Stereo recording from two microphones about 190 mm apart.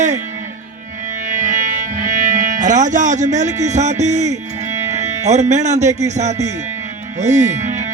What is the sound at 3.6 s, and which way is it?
Speech, 40° right (ahead or behind).